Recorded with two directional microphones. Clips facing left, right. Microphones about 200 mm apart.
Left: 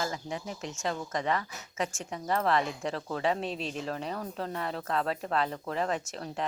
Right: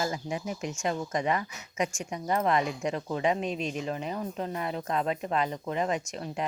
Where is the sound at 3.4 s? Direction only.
30° left (ahead or behind).